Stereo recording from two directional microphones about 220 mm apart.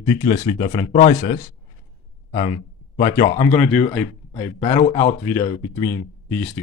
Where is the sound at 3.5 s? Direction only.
5° left (ahead or behind).